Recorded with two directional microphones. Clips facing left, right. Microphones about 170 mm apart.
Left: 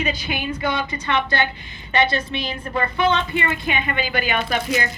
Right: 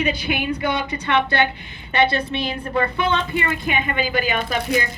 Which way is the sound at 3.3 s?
45° right (ahead or behind).